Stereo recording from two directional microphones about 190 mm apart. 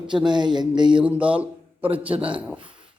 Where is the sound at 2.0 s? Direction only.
5° right (ahead or behind).